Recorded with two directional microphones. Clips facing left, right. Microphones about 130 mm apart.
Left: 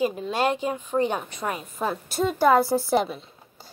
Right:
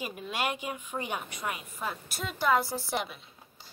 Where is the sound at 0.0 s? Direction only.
30° left (ahead or behind).